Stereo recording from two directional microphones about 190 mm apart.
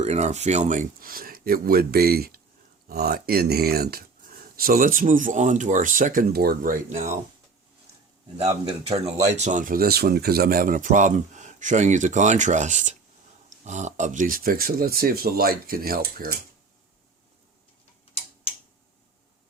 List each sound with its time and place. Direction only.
0.0 s speech: 35° right (ahead or behind)
8.4 s speech: 35° right (ahead or behind)